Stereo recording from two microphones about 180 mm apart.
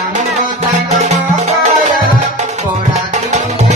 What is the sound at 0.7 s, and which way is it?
Music, 40° right (ahead or behind).